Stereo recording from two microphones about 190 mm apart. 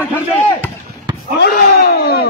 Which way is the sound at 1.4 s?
55° left (ahead or behind).